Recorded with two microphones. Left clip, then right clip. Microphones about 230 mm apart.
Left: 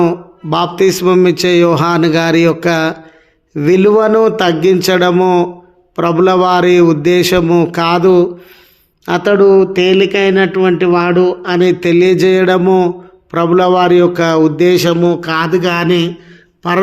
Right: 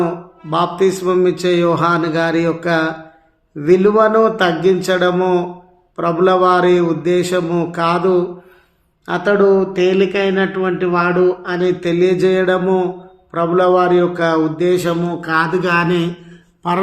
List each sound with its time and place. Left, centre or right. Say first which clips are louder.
0.5 s a man's voice: left 3 dB; left